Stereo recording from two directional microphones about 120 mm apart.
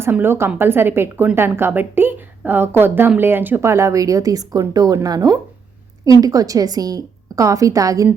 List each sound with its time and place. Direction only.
0.0 s a woman's voice: 20° right (ahead or behind)